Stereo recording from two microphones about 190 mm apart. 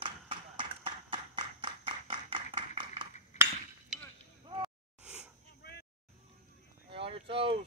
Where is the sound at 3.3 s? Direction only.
35° left (ahead or behind).